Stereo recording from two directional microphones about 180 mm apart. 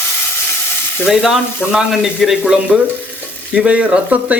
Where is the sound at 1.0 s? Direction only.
Centre (ahead or behind).